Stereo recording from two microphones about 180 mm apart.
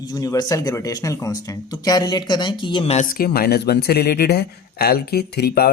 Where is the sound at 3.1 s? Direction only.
55° left (ahead or behind).